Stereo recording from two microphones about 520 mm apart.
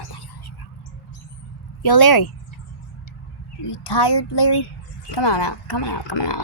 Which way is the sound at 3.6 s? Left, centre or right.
Left.